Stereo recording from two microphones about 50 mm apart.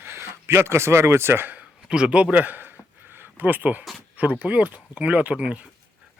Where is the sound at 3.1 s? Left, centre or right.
Right.